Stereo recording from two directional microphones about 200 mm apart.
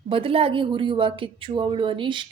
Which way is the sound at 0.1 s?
30° right (ahead or behind).